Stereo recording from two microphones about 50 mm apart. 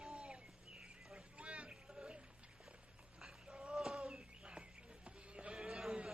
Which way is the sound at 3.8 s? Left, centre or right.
Centre.